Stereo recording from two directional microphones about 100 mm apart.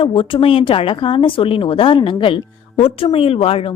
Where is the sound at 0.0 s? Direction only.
60° left (ahead or behind).